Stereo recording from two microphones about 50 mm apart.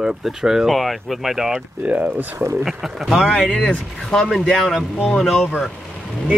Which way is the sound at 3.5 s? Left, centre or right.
Centre.